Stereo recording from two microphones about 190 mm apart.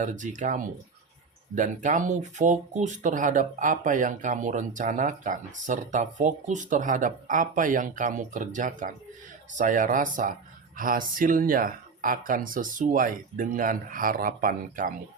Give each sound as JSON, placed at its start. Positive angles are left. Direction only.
{"t": 0.0, "sound": "speech", "side_deg": -40}